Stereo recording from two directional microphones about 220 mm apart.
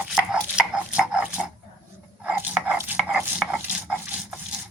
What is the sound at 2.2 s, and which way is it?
Dog, 10° right (ahead or behind).